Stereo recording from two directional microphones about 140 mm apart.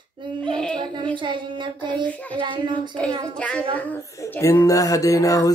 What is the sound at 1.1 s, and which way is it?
Speech, 35° right (ahead or behind).